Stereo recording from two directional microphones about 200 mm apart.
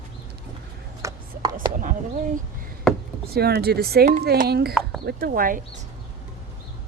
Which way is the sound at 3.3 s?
50° right (ahead or behind).